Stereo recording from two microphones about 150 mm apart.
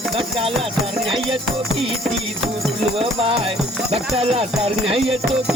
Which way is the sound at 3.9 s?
40° right (ahead or behind).